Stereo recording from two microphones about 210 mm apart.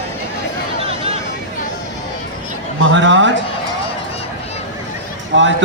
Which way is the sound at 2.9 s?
60° right (ahead or behind).